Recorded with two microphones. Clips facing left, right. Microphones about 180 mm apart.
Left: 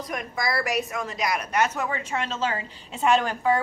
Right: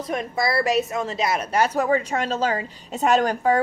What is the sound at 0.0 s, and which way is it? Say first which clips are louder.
A woman's voice: right 5 dB; 25° right (ahead or behind).